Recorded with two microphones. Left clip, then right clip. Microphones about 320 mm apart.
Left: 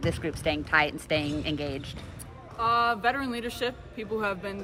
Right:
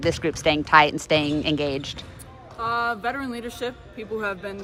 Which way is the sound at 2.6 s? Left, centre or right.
Centre.